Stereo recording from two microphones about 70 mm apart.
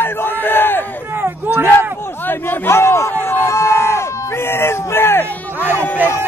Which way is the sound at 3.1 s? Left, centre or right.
Left.